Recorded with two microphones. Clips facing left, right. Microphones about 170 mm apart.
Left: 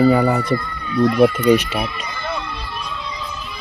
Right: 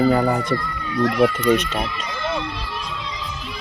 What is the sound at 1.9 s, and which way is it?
Music, 90° right.